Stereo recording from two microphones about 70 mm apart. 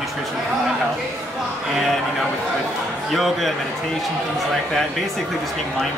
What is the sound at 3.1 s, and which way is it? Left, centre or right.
Speech, centre.